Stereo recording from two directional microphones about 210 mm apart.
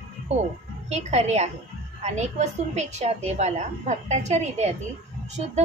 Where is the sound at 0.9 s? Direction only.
30° right (ahead or behind).